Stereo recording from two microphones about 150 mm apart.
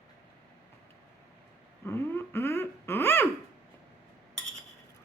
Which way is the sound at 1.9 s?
15° left (ahead or behind).